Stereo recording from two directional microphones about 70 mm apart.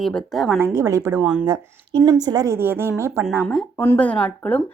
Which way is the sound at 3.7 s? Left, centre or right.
Left.